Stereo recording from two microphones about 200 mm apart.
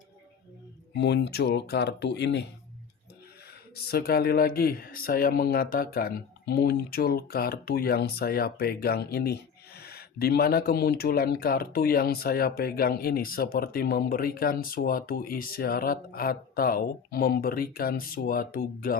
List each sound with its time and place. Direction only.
0.9 s speech: 60° left (ahead or behind)
3.8 s speech: 55° left (ahead or behind)